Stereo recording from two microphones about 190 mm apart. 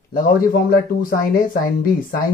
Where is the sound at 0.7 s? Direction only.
50° left (ahead or behind).